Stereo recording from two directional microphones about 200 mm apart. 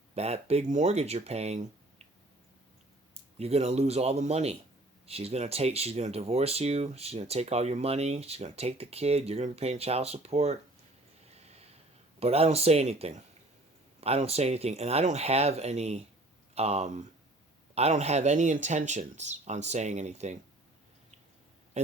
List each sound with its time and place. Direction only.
0.1 s speech: 30° right (ahead or behind)
3.3 s speech: 30° right (ahead or behind)
11.3 s a sound: 30° right (ahead or behind)
12.2 s speech: 30° right (ahead or behind)